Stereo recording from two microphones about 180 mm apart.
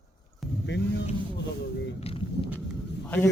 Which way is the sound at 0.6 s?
75° left (ahead or behind).